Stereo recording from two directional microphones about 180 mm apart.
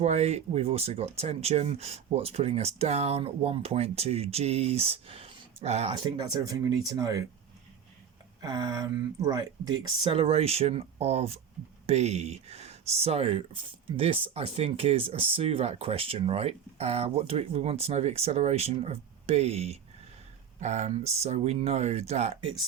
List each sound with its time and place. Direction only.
0.0 s speech: 40° right (ahead or behind); by 7.3 s 20° right (ahead or behind)
8.4 s speech: 20° right (ahead or behind); by 22.4 s 35° right (ahead or behind)